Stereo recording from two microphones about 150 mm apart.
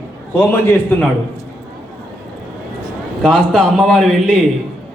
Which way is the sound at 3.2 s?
5° left (ahead or behind).